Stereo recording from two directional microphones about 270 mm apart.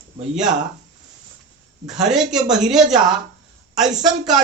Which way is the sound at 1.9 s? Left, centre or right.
Centre.